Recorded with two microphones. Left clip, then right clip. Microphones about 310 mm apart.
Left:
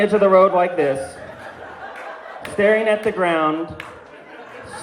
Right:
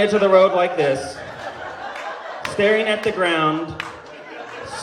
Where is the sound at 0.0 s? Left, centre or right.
Left.